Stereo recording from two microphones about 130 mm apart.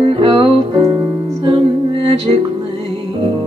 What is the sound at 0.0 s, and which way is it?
Music, 45° right (ahead or behind).